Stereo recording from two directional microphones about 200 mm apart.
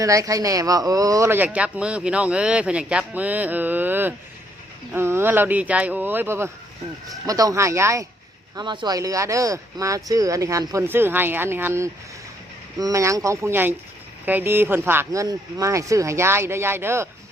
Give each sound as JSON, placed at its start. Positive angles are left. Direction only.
{"t": 0.0, "sound": "speech", "side_deg": -15}